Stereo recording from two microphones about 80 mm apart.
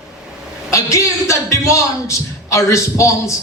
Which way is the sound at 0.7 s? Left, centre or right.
Left.